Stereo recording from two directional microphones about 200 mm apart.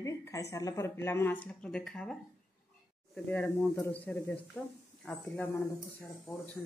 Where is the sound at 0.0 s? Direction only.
15° left (ahead or behind).